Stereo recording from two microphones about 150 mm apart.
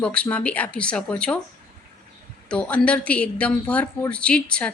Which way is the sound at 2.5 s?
5° left (ahead or behind).